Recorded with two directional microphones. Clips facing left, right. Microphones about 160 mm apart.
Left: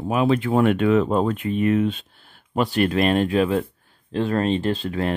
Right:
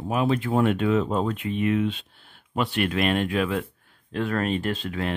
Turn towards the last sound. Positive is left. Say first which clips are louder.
# left 5 dB
turn(degrees=40)  # may be behind; listen again after turning